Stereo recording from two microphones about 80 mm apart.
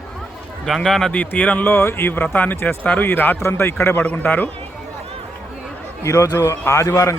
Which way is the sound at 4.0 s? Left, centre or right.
Centre.